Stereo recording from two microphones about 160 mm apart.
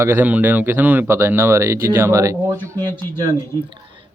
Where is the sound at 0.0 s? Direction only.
15° right (ahead or behind).